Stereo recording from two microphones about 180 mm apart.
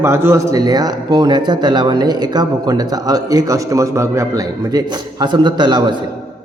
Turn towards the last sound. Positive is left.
turn(degrees=-25)  # may be behind; listen again after turning